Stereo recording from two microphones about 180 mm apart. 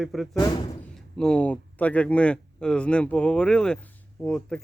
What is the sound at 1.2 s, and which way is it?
Speech, 5° left (ahead or behind).